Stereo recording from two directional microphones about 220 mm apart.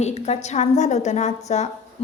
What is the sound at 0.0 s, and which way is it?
A woman's voice, 30° left (ahead or behind).